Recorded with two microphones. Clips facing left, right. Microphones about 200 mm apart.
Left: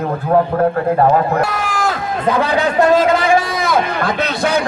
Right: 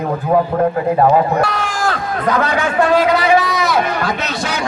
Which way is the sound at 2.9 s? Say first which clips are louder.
Right 3 dB; 45° left (ahead or behind).